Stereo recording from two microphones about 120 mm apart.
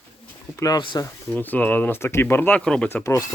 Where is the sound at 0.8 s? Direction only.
40° left (ahead or behind).